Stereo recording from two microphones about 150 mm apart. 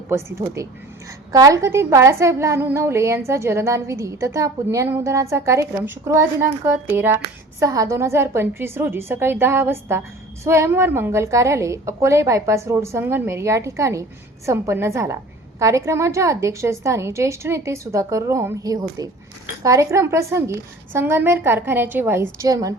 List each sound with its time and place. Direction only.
0.1 s a woman's voice: 20° right (ahead or behind)